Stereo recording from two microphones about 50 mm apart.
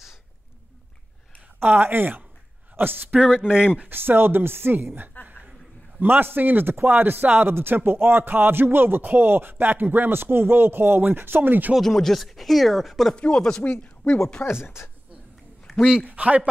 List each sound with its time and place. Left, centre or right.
1.6 s speech: right
3.2 s speech: centre
3.9 s speech: right
5.2 s chuckle: right
5.9 s speech: right
11.8 s speech: centre
13.1 s chopping: centre
13.7 s speech: centre
14.4 s speech: left
15.7 s a sound: centre
16.1 s a man's voice: right